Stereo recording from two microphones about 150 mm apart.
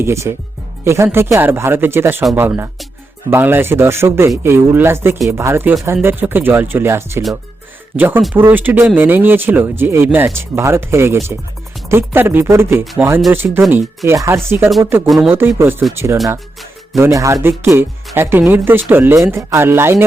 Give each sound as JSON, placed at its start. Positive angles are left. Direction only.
{"t": 0.0, "sound": "speech", "side_deg": -15}
{"t": 15.0, "sound": "speech", "side_deg": 0}
{"t": 15.5, "sound": "speech", "side_deg": -15}